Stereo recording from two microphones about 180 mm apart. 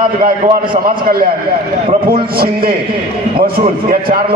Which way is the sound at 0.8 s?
55° right (ahead or behind).